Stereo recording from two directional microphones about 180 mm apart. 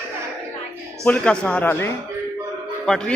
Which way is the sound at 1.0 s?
5° left (ahead or behind).